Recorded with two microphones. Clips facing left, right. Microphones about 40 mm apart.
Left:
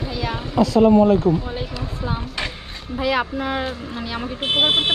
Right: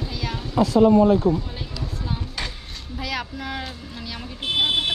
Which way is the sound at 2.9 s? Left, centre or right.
Left.